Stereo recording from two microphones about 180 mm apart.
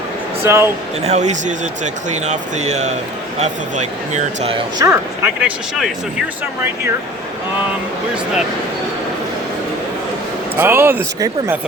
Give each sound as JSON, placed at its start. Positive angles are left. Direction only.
{"t": 0.4, "sound": "speech", "side_deg": -15}
{"t": 1.0, "sound": "speech", "side_deg": -40}
{"t": 4.8, "sound": "speech", "side_deg": -10}
{"t": 10.6, "sound": "speech", "side_deg": -15}